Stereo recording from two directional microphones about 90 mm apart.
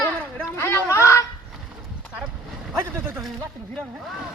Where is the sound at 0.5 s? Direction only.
30° left (ahead or behind).